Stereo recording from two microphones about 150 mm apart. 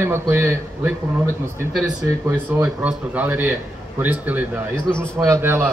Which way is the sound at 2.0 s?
15° right (ahead or behind).